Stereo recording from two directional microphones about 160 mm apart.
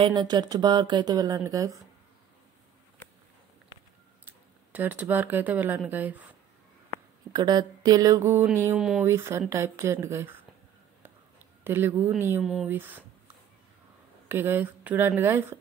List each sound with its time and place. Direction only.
0.0 s speech: 25° right (ahead or behind)
4.7 s speech: 10° right (ahead or behind)
7.3 s speech: 25° right (ahead or behind)
8.7 s speech: 5° right (ahead or behind)
9.0 s speech: 15° right (ahead or behind)
11.6 s speech: 15° right (ahead or behind)
14.3 s speech: 15° right (ahead or behind)